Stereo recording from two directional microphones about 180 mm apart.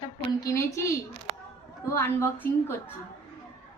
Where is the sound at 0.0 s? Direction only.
20° left (ahead or behind).